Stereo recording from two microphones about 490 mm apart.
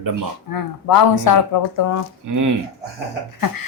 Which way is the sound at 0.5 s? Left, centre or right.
Left.